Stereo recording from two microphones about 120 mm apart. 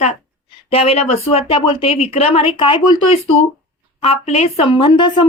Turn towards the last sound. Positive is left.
turn(degrees=45)  # may be behind; listen again after turning